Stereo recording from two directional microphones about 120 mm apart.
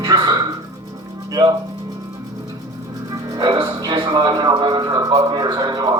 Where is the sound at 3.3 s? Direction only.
40° right (ahead or behind).